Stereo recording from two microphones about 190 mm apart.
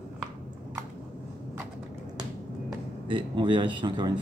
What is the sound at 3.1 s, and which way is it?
Speech, 25° right (ahead or behind).